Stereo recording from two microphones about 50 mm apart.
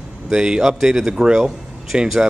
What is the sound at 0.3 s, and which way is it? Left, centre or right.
Speech, centre.